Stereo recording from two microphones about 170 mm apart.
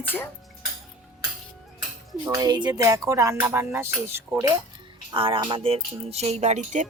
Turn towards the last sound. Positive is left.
turn(degrees=-45)  # may be behind; listen again after turning